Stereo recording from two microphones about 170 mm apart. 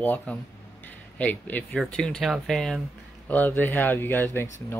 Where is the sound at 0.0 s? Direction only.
10° left (ahead or behind).